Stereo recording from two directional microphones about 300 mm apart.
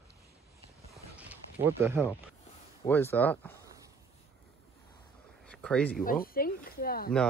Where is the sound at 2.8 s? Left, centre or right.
Centre.